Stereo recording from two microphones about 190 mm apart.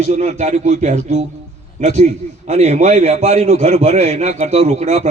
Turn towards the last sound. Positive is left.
turn(degrees=-35)  # may be behind; listen again after turning